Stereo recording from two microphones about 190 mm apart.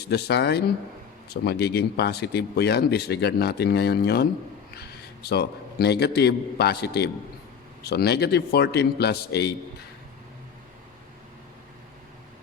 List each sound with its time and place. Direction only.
0.0 s a man's voice: 60° left (ahead or behind)